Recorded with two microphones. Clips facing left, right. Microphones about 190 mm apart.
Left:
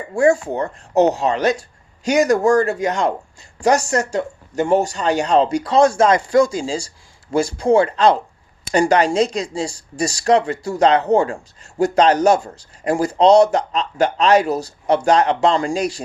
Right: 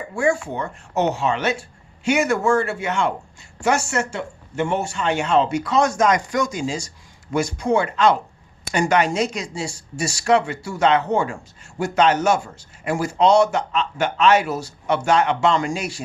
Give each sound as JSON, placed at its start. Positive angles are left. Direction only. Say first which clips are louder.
{"t": 0.2, "sound": "speech", "louder": "left 6 dB", "side_deg": 35}